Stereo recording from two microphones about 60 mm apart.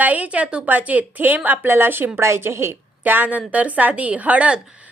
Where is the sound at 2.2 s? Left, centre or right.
Right.